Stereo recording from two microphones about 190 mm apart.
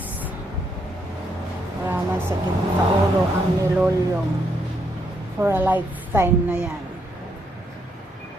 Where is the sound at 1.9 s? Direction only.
10° right (ahead or behind).